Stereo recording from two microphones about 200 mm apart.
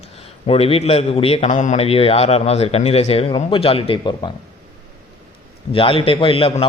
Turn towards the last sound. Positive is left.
turn(degrees=30)  # may be behind; listen again after turning